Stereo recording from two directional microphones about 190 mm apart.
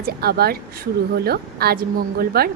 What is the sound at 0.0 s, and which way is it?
A woman's voice, 55° right (ahead or behind).